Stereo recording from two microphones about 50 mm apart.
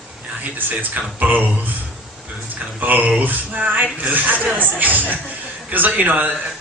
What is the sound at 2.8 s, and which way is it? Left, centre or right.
Speech, right.